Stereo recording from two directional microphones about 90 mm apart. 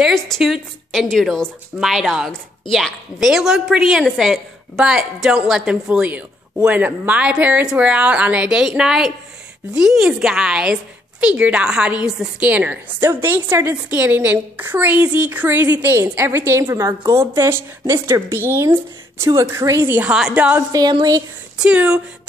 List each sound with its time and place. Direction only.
0.0 s a woman's voice: centre (ahead or behind); by 18.8 s 20° right (ahead or behind)
19.2 s a woman's voice: 35° right (ahead or behind)
19.9 s a woman's voice: 15° right (ahead or behind)